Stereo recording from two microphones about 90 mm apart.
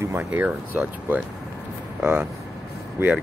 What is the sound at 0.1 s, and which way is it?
Speech, 20° right (ahead or behind).